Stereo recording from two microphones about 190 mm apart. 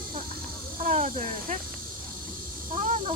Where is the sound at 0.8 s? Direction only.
45° right (ahead or behind).